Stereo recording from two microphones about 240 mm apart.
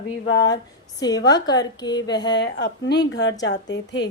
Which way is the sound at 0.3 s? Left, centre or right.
Left.